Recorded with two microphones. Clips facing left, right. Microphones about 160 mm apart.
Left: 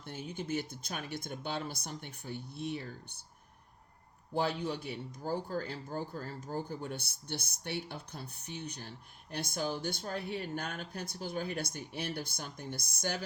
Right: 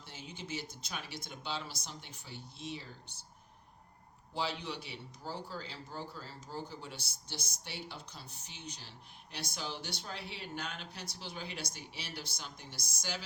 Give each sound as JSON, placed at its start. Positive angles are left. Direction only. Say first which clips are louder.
{"t": 0.0, "sound": "speech", "louder": "left 7 dB", "side_deg": 55}
{"t": 4.4, "sound": "speech", "louder": "left 5 dB", "side_deg": 50}